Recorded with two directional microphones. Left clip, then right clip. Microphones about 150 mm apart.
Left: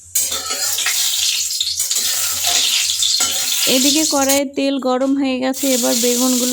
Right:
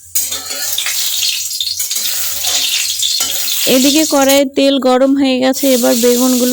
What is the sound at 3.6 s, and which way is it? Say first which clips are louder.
Speech: right 5 dB; 30° right (ahead or behind).